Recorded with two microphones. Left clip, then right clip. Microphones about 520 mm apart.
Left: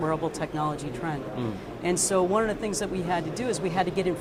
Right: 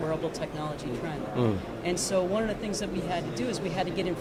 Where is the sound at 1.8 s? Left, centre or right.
Left.